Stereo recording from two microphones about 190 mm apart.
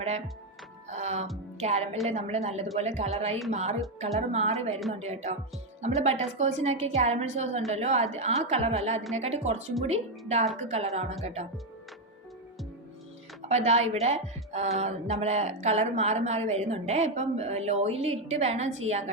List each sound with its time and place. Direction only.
0.9 s music: 35° right (ahead or behind)
1.6 s speech: 35° right (ahead or behind)
13.5 s speech: 35° right (ahead or behind)